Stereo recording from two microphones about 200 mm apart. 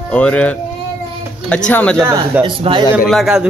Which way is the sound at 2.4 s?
25° right (ahead or behind).